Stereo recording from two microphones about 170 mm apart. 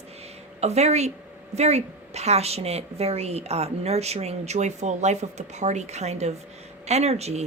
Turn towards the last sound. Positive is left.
turn(degrees=-40)  # may be behind; listen again after turning